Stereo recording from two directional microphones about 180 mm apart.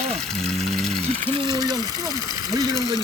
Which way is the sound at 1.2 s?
25° right (ahead or behind).